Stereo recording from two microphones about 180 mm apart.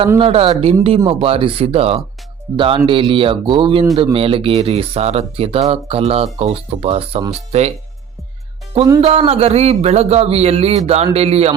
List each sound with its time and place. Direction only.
0.2 s speech: 30° right (ahead or behind)
9.0 s speech: 35° right (ahead or behind)